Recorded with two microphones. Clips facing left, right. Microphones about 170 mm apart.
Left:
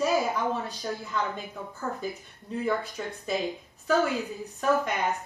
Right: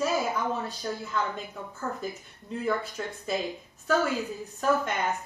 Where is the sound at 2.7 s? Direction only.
Centre (ahead or behind).